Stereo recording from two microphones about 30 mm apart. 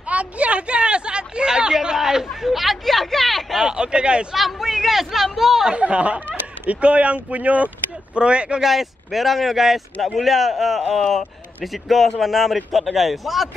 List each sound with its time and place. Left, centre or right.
0.1 s a sound: right; by 2.2 s centre
2.4 s speech: centre
3.5 s speech: right
4.4 s a man's voice: centre
5.8 s speech: right
8.2 s speech: right
8.5 s a man's voice: centre